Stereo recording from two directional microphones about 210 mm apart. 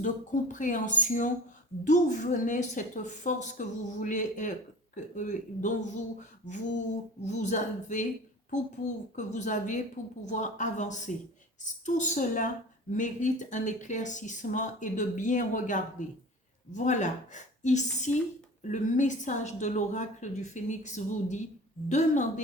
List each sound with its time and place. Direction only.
0.0 s speech: 35° left (ahead or behind)